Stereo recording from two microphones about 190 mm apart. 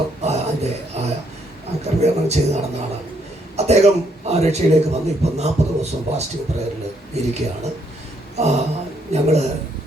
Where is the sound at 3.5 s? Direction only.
35° right (ahead or behind).